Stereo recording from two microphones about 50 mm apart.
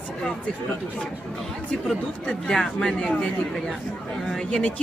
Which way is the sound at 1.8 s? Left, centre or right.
Centre.